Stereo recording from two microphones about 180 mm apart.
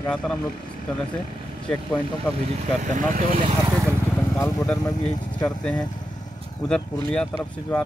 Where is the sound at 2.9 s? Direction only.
45° right (ahead or behind).